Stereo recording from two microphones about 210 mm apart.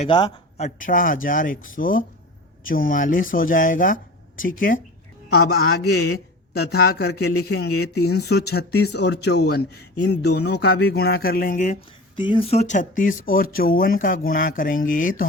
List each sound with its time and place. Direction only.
0.0 s a man's voice: 25° left (ahead or behind); by 7.1 s 45° left (ahead or behind)
7.3 s speech: 90° left
8.1 s a man's voice: 50° left (ahead or behind); by 11.8 s 35° left (ahead or behind)
12.1 s speech: 25° left (ahead or behind); by 15.3 s 40° left (ahead or behind)